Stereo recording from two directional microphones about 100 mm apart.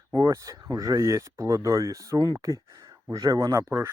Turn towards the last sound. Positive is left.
turn(degrees=-35)  # may be behind; listen again after turning